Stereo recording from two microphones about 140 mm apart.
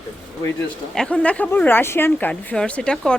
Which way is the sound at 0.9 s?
10° left (ahead or behind).